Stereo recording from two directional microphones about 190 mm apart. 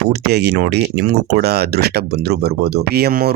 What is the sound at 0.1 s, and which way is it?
Speech, 60° right (ahead or behind).